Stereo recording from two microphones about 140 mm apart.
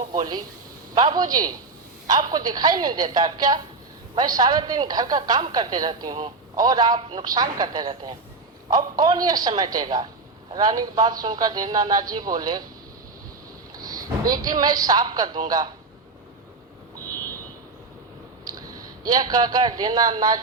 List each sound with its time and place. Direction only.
0.1 s a woman's voice: 30° right (ahead or behind)
13.7 s a man's voice: 25° right (ahead or behind)
18.4 s a man's voice: 30° right (ahead or behind)